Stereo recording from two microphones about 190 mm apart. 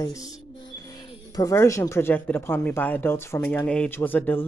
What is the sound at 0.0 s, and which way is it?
Speech, 20° left (ahead or behind).